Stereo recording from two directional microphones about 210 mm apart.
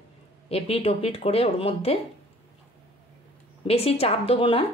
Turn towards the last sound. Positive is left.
turn(degrees=25)  # may be behind; listen again after turning